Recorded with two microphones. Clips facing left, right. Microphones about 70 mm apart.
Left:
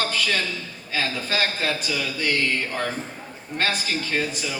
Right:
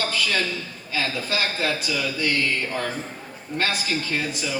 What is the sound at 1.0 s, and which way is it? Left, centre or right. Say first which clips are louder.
Speech: even; left.